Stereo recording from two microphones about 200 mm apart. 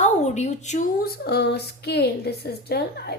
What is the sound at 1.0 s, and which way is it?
A woman's voice, 55° left (ahead or behind).